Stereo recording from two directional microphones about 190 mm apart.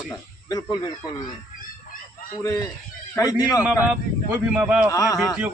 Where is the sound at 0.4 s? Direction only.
20° left (ahead or behind).